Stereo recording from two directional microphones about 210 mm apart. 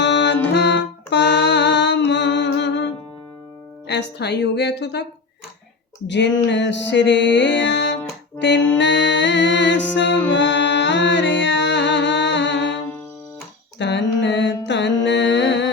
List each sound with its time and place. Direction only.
0.0 s music: 55° left (ahead or behind)
3.8 s a woman's voice: 55° left (ahead or behind)
6.1 s music: 60° left (ahead or behind)
13.7 s mantra: 55° left (ahead or behind)
15.0 s music: 60° left (ahead or behind)